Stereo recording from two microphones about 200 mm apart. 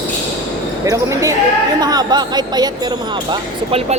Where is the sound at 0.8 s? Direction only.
15° right (ahead or behind).